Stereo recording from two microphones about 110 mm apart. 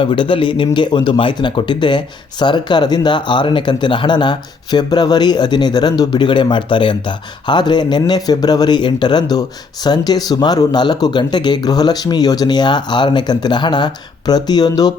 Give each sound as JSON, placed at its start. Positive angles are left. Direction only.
{"t": 0.0, "sound": "speech", "side_deg": 50}